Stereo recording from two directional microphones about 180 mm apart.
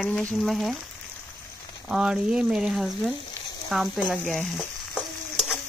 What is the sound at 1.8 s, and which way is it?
Speech, 5° right (ahead or behind).